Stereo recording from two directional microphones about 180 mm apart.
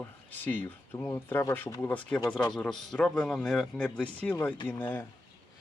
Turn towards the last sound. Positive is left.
turn(degrees=10)  # may be behind; listen again after turning